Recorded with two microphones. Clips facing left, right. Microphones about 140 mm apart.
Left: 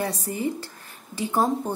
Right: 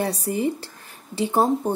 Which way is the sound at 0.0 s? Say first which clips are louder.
Right 4 dB; 35° right (ahead or behind).